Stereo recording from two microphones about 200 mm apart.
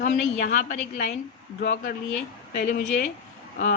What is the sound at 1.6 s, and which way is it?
Speech, 45° left (ahead or behind).